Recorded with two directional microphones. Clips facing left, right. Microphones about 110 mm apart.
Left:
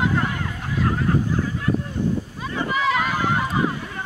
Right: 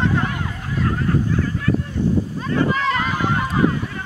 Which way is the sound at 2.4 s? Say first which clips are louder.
Right 1 dB; 5° left (ahead or behind).